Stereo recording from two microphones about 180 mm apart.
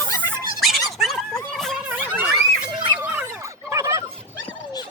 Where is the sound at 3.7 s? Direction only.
15° right (ahead or behind).